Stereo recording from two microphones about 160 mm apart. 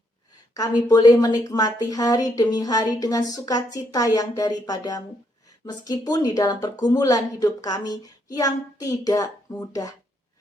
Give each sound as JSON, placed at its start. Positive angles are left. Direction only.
{"t": 0.9, "sound": "a woman's voice", "side_deg": 25}